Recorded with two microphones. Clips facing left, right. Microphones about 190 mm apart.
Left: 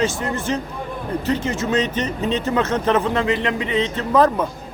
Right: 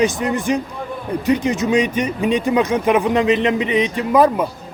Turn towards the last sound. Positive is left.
turn(degrees=-10)  # may be behind; listen again after turning